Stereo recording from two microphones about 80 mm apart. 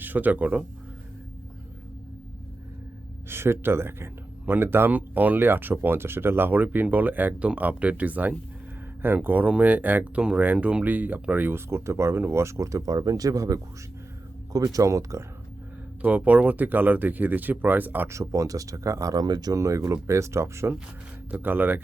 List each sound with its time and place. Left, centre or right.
0.0 s speech: right
3.2 s speech: right
16.0 s speech: centre
18.1 s speech: right
21.2 s speech: right